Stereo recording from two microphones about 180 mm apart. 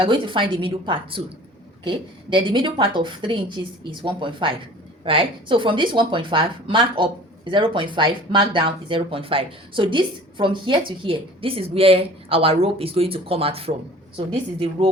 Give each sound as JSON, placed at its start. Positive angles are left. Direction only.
{"t": 0.0, "sound": "a woman's voice", "side_deg": -25}